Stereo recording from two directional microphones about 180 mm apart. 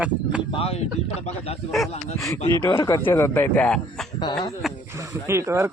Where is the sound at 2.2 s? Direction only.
10° left (ahead or behind).